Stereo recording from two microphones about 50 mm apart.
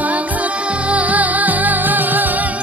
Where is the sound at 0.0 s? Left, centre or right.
Right.